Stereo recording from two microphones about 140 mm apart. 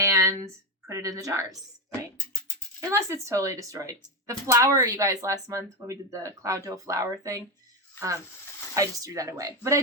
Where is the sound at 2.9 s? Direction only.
20° right (ahead or behind).